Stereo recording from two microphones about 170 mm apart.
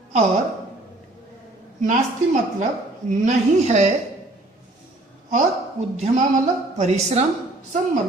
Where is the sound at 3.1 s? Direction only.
40° right (ahead or behind).